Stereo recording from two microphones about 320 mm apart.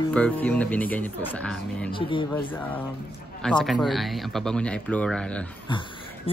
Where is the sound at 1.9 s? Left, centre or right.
Centre.